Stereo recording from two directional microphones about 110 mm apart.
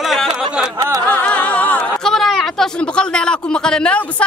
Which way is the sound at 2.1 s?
5° left (ahead or behind).